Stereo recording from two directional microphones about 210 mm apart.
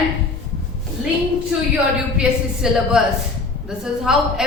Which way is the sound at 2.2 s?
Centre (ahead or behind).